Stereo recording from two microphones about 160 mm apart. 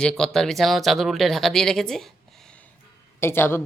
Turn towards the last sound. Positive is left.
turn(degrees=15)  # may be behind; listen again after turning